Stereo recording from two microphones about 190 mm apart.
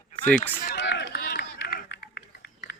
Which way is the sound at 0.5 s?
60° left (ahead or behind).